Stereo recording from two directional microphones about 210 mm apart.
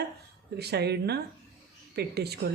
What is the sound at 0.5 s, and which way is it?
Speech, 50° right (ahead or behind).